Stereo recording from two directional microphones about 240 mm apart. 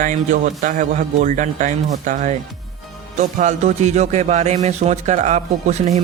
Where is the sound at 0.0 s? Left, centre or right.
Right.